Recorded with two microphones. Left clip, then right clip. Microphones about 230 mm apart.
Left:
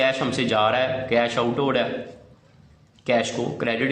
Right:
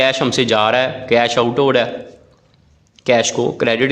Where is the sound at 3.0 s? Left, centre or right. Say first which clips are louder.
Right 8 dB; right.